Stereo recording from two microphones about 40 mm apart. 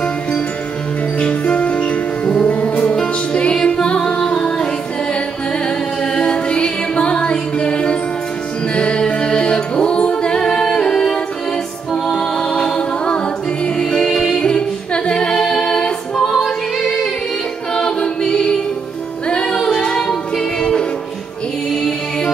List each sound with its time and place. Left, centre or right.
1.2 s music: left
4.2 s music: centre
6.1 s music: left
8.7 s a capella: left
11.9 s music: centre
15.0 s a capella: left
16.3 s choir: centre
17.7 s a capella: left
19.2 s music: left
19.5 s music: centre